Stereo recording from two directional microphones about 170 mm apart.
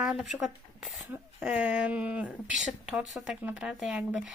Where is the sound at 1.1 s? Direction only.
10° right (ahead or behind).